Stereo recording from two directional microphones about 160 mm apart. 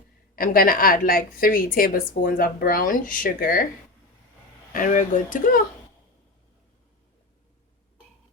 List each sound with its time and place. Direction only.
0.3 s a woman's voice: 65° left (ahead or behind)
4.7 s a woman's voice: 55° left (ahead or behind)